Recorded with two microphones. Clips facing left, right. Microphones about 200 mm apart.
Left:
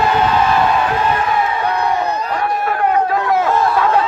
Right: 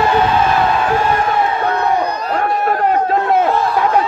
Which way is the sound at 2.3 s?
50° right (ahead or behind).